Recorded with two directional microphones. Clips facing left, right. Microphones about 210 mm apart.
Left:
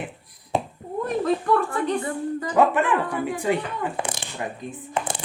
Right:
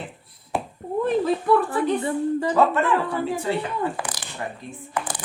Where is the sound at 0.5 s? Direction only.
20° left (ahead or behind).